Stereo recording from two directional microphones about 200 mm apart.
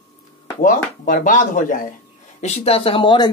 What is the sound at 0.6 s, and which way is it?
A man's voice, 40° left (ahead or behind).